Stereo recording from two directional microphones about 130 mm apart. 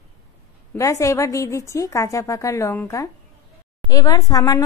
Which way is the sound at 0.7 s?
25° left (ahead or behind).